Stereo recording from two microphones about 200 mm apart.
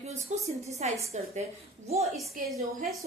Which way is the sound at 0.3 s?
35° right (ahead or behind).